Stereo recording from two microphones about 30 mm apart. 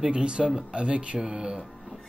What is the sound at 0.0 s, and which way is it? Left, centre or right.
Speech, right.